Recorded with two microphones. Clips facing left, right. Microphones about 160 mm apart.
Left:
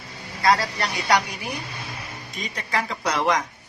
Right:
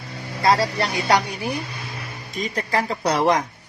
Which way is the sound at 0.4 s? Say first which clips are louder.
Right 2 dB; 30° right (ahead or behind).